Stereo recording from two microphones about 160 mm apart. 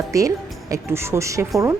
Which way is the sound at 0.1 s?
20° right (ahead or behind).